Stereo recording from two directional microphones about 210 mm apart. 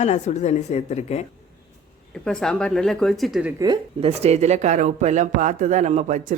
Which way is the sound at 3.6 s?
25° right (ahead or behind).